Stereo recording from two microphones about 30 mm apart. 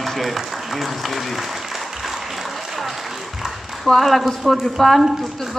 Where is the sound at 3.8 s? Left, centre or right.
Centre.